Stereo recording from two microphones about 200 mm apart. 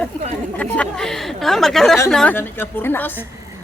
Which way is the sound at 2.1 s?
5° left (ahead or behind).